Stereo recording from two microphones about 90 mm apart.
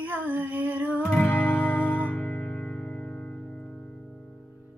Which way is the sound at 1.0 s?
15° left (ahead or behind).